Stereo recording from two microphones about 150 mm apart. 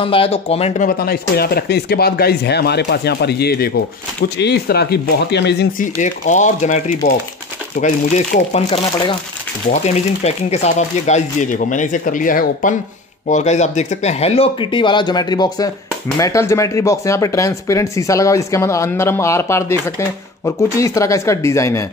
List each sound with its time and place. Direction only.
0.0 s speech: 40° left (ahead or behind)
0.7 s speech: 85° left
5.9 s speech: 55° left (ahead or behind)
7.7 s speech: 65° left (ahead or behind)
9.7 s speech: 45° left (ahead or behind); by 12.7 s 65° left (ahead or behind)
13.3 s speech: 50° left (ahead or behind); by 21.8 s 20° left (ahead or behind)